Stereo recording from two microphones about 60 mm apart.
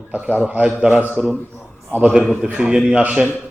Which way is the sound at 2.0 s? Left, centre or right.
Centre.